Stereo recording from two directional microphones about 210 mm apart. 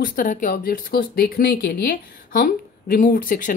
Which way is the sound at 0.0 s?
40° left (ahead or behind).